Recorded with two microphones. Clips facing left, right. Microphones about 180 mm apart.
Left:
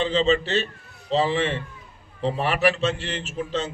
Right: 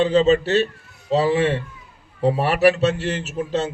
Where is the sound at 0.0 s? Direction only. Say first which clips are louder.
Right 5 dB; 40° right (ahead or behind).